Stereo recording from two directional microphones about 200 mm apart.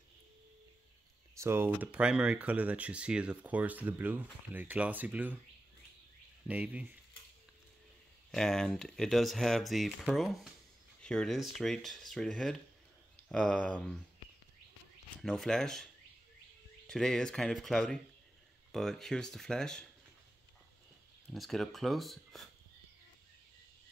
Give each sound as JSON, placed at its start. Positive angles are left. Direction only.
{"t": 1.4, "sound": "speech", "side_deg": -10}
{"t": 6.4, "sound": "speech", "side_deg": -5}
{"t": 8.3, "sound": "speech", "side_deg": 0}
{"t": 15.2, "sound": "speech", "side_deg": 0}
{"t": 21.3, "sound": "speech", "side_deg": 0}